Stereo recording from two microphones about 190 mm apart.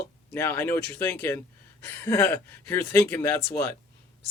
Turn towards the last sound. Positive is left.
turn(degrees=15)  # may be behind; listen again after turning